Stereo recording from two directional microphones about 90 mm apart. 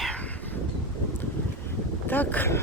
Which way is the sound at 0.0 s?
15° left (ahead or behind).